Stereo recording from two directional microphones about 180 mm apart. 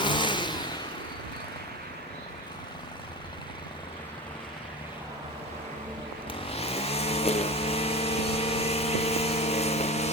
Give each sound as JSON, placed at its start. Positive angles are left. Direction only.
{"t": 0.0, "sound": "vehicle", "side_deg": 25}
{"t": 6.5, "sound": "vehicle", "side_deg": 35}